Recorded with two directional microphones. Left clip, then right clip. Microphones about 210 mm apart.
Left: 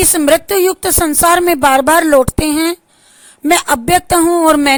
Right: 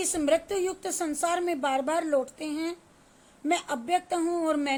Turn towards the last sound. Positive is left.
turn(degrees=55)  # may be behind; listen again after turning